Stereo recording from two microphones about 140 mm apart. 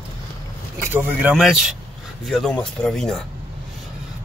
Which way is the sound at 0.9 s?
10° right (ahead or behind).